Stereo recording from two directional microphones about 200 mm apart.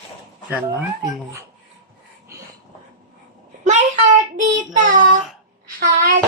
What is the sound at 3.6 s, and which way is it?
Speech, 35° right (ahead or behind).